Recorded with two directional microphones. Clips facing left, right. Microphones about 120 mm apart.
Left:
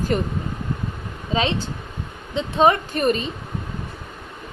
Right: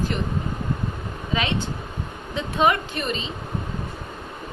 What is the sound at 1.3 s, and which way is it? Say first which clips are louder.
Speech: left 3 dB; 30° left (ahead or behind).